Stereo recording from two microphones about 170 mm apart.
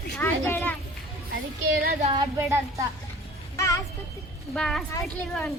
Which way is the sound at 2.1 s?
20° right (ahead or behind).